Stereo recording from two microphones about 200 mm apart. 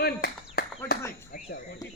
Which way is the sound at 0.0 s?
55° left (ahead or behind).